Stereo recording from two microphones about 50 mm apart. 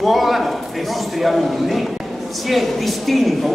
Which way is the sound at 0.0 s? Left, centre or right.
Centre.